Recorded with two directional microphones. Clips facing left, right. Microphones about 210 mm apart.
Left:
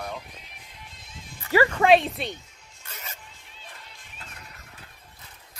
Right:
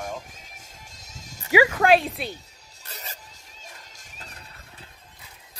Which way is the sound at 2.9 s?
35° right (ahead or behind).